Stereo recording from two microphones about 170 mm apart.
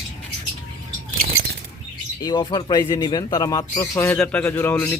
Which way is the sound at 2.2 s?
25° left (ahead or behind).